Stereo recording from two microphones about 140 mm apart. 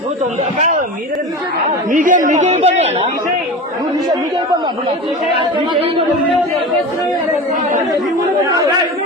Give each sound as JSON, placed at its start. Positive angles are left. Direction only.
{"t": 1.9, "sound": "a man's voice", "side_deg": -70}
{"t": 5.4, "sound": "speech", "side_deg": -40}